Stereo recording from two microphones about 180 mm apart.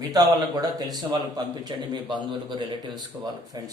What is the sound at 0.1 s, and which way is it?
A man's voice, 20° right (ahead or behind).